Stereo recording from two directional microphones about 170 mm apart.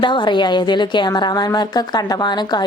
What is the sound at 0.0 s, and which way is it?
Speech, 25° left (ahead or behind).